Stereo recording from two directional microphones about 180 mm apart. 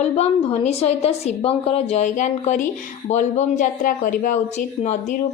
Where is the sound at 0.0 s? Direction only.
35° left (ahead or behind).